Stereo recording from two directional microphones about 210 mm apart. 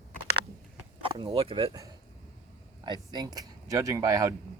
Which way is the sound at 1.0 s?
25° right (ahead or behind).